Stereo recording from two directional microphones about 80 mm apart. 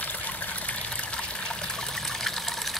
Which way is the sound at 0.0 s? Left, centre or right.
Left.